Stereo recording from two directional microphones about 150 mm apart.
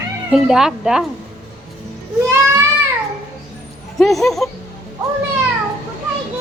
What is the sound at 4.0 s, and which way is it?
Speech, centre (ahead or behind).